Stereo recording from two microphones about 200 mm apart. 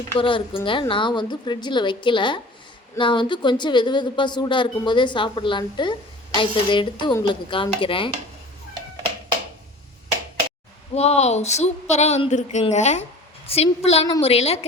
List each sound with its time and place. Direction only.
0.2 s speech: 25° left (ahead or behind)
10.9 s speech: 30° left (ahead or behind)